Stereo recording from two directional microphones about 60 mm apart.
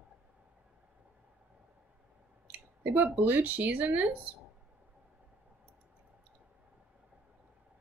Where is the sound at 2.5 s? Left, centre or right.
Right.